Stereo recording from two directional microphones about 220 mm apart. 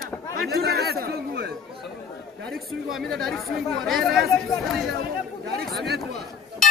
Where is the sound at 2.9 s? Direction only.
Centre (ahead or behind).